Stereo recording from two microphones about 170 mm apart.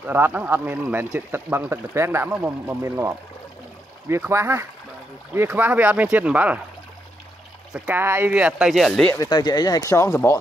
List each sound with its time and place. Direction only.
0.0 s speech: 10° right (ahead or behind)
7.7 s speech: 10° right (ahead or behind)
9.1 s speech: 20° left (ahead or behind)